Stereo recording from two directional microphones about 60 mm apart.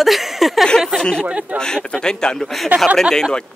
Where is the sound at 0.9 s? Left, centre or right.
Centre.